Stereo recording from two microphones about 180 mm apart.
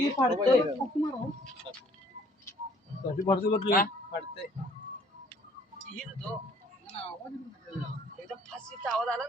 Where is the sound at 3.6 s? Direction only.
55° left (ahead or behind).